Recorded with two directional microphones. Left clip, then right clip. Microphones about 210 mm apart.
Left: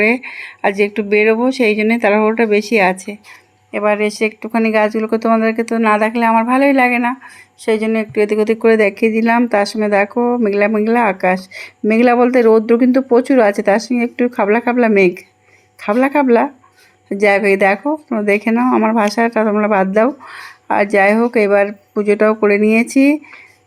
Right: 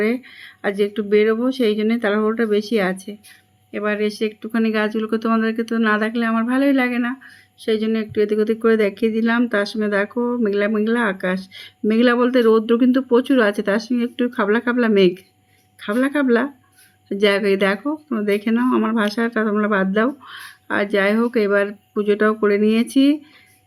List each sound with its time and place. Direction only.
0.2 s speech: 45° right (ahead or behind)
1.0 s speech: centre (ahead or behind)
3.7 s speech: 5° right (ahead or behind)